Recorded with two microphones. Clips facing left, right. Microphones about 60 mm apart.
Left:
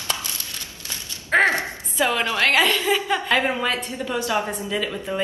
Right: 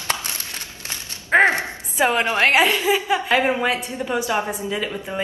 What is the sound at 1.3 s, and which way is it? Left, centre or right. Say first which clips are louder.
A woman's voice: right 2 dB; right.